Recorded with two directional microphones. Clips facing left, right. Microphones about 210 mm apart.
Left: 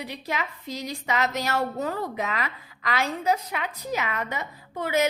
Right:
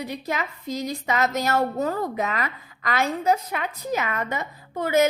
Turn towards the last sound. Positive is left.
turn(degrees=-45)  # may be behind; listen again after turning